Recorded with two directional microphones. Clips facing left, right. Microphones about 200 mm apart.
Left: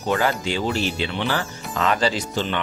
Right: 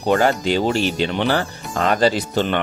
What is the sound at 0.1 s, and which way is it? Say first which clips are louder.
Speech: right 5 dB; 45° right (ahead or behind).